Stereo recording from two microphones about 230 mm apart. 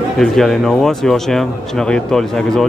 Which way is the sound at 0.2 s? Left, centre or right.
Centre.